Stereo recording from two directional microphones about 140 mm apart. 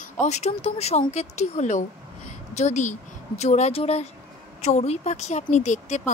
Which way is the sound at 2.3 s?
55° left (ahead or behind).